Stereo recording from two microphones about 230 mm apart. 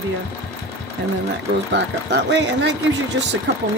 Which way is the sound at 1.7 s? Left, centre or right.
Right.